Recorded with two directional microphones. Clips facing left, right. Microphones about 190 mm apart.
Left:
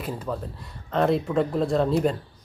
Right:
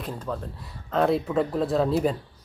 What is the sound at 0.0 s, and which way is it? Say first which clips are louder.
Speech: left 2 dB; 5° left (ahead or behind).